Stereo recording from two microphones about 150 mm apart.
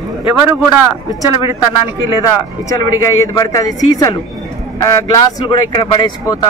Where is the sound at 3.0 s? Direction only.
25° left (ahead or behind).